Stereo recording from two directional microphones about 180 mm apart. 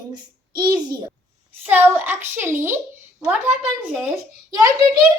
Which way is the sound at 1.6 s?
10° right (ahead or behind).